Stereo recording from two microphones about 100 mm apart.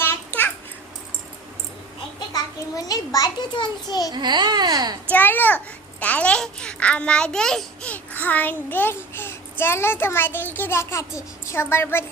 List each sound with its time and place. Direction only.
0.0 s babbling: 20° left (ahead or behind)
2.1 s a child's voice: 40° left (ahead or behind)
4.1 s speech: 45° right (ahead or behind)
5.1 s a child's voice: 20° left (ahead or behind)